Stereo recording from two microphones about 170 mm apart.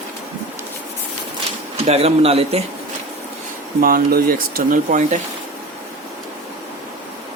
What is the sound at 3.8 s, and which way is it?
Speech, 60° right (ahead or behind).